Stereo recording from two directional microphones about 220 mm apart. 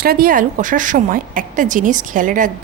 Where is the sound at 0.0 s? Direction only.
40° right (ahead or behind).